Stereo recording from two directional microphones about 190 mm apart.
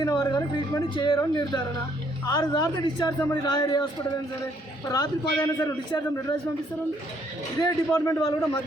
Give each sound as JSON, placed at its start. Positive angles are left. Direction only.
{"t": 0.0, "sound": "speech", "side_deg": 20}
{"t": 7.6, "sound": "a man's voice", "side_deg": 15}